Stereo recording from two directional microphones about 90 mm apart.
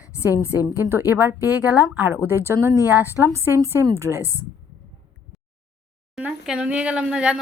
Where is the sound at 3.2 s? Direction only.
30° right (ahead or behind).